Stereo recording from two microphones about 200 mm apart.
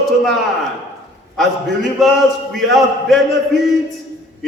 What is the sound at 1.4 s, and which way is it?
A man's voice, centre (ahead or behind).